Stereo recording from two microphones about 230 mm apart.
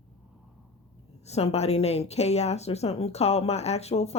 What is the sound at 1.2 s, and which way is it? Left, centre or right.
A woman's voice, left.